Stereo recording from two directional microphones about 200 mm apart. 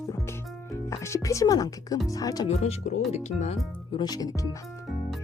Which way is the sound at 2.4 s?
30° left (ahead or behind).